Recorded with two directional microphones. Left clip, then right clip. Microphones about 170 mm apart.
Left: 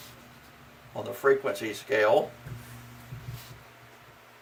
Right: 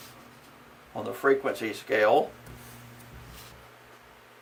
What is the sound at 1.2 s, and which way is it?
Speech, 30° right (ahead or behind).